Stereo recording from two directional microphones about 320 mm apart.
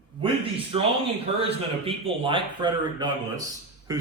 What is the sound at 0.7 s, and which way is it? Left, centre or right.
Speech, centre.